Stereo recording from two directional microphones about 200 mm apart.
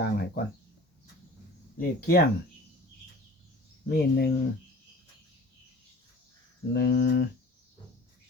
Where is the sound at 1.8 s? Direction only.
50° left (ahead or behind).